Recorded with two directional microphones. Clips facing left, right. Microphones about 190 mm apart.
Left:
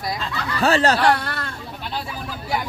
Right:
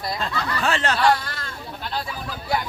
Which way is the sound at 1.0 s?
65° left (ahead or behind).